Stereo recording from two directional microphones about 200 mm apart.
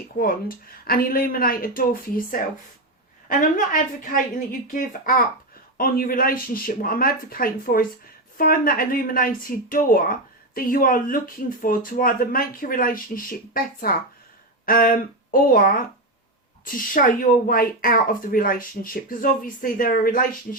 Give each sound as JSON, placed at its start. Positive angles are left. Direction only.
{"t": 0.2, "sound": "a woman's voice", "side_deg": 45}